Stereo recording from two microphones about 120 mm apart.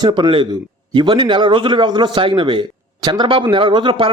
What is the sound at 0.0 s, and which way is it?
A man's voice, 40° right (ahead or behind).